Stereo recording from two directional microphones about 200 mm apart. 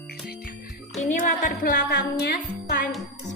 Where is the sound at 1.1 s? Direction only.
40° left (ahead or behind).